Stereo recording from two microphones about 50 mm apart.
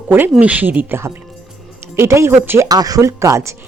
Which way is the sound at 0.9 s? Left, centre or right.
Right.